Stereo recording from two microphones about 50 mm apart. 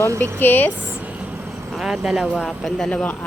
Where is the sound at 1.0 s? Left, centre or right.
Right.